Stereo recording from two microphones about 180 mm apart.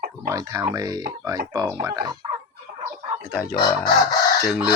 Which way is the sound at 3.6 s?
20° left (ahead or behind).